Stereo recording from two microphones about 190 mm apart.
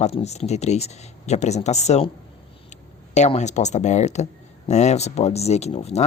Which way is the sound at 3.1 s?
35° left (ahead or behind).